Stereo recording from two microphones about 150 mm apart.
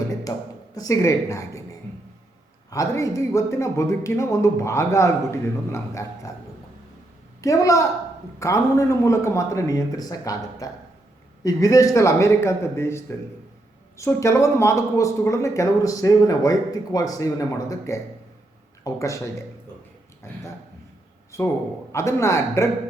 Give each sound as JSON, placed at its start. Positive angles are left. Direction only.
{"t": 0.3, "sound": "speech", "side_deg": 25}
{"t": 2.6, "sound": "speech", "side_deg": 20}
{"t": 7.4, "sound": "speech", "side_deg": 20}
{"t": 21.3, "sound": "a man's voice", "side_deg": 20}